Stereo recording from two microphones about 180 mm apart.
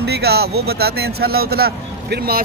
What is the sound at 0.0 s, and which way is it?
Speech, 65° right (ahead or behind).